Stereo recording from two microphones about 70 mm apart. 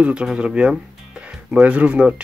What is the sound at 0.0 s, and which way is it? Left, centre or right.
Speech, centre.